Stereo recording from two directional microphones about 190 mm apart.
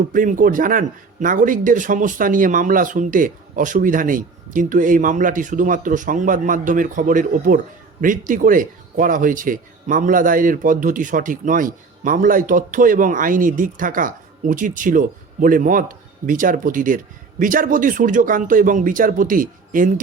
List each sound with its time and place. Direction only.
0.1 s speech: 45° right (ahead or behind)